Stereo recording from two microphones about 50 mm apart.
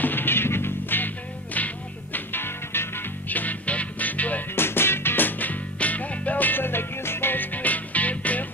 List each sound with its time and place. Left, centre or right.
0.0 s music: left
2.1 s music: left
3.3 s music: left
4.6 s music: left